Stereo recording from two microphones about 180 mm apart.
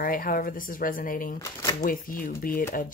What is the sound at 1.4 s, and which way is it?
Speech, 20° left (ahead or behind).